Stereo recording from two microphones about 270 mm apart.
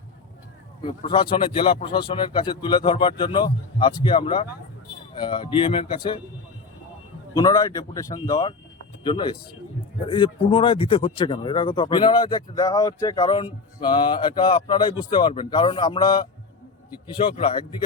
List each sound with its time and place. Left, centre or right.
0.8 s speech: centre
7.3 s speech: centre